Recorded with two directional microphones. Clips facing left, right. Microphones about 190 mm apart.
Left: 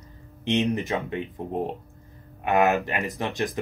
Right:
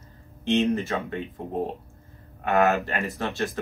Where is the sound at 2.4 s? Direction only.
15° left (ahead or behind).